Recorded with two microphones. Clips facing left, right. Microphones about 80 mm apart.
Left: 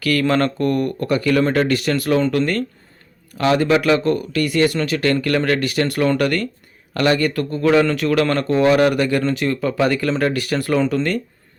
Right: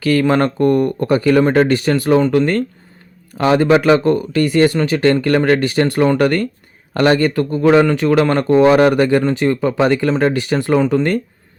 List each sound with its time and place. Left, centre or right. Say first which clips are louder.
0.0 s speech: right 4 dB; right
3.3 s speech: right 4 dB; right